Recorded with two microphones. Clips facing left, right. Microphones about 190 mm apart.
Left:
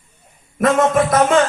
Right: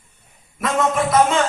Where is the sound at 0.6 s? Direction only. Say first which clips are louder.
Left 5 dB; 50° left (ahead or behind).